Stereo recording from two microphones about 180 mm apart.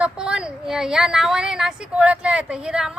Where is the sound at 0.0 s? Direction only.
5° right (ahead or behind).